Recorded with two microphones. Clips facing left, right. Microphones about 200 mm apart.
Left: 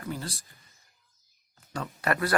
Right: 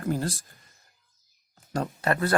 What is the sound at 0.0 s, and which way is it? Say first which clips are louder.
Speech: right 8 dB; 45° right (ahead or behind).